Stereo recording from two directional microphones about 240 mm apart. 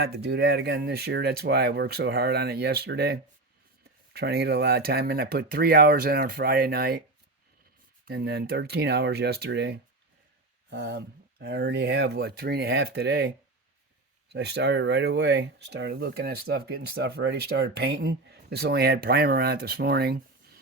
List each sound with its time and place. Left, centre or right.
0.0 s speech: right
8.0 s speech: right
14.3 s speech: right